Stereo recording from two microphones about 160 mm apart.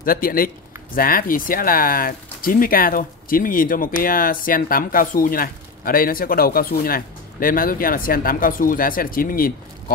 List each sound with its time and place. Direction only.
0.0 s speech: 65° left (ahead or behind)